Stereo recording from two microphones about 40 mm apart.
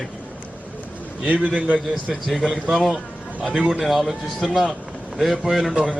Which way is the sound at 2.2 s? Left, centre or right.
Centre.